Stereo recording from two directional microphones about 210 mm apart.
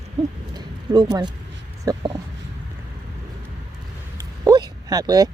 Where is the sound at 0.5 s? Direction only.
20° right (ahead or behind).